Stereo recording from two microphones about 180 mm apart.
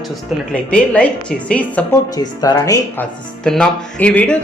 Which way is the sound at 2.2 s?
20° left (ahead or behind).